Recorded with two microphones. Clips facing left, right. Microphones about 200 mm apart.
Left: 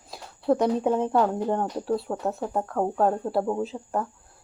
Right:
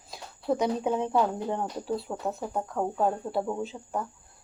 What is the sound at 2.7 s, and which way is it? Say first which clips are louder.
Speech: left 4 dB; 50° left (ahead or behind).